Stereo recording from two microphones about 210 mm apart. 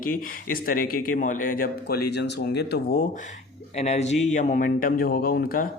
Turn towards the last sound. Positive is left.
turn(degrees=45)  # may be behind; listen again after turning